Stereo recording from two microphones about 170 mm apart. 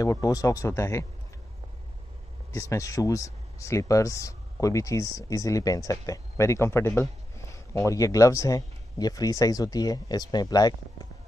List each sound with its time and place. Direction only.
0.0 s speech: 20° left (ahead or behind)
2.5 s speech: 20° left (ahead or behind)